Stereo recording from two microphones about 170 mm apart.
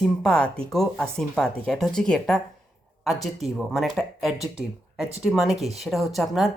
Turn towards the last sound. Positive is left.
turn(degrees=0)  # may be behind; listen again after turning